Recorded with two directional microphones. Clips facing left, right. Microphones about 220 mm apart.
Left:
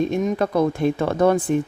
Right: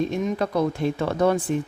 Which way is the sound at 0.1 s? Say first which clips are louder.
Left 3 dB; 50° left (ahead or behind).